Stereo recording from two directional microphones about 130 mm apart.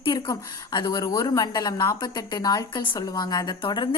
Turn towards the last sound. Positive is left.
turn(degrees=35)  # may be behind; listen again after turning